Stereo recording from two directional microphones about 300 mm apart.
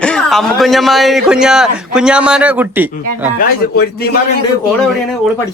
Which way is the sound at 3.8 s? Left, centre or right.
Left.